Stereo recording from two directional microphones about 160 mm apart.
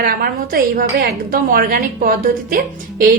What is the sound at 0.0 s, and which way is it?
A woman's voice, 65° right (ahead or behind).